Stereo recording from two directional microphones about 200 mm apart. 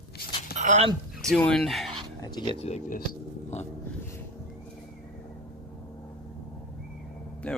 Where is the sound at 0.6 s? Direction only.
35° right (ahead or behind).